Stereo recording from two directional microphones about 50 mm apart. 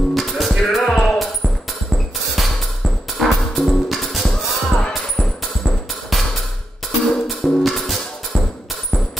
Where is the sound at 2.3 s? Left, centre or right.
Centre.